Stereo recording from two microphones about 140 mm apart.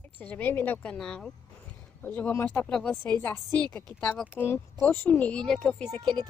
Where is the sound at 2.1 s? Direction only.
15° left (ahead or behind).